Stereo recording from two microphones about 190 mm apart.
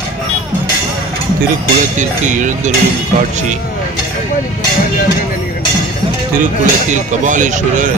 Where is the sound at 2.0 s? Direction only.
40° right (ahead or behind).